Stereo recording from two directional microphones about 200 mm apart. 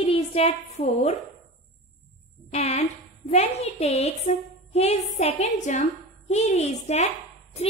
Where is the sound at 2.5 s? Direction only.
30° left (ahead or behind).